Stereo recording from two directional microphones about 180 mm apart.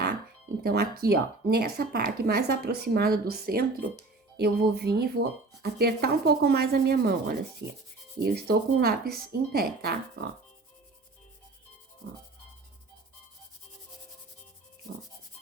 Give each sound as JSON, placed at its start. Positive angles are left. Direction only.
{"t": 0.6, "sound": "rub", "side_deg": -60}